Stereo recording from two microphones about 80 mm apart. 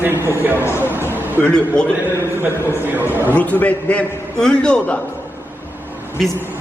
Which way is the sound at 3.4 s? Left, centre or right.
Centre.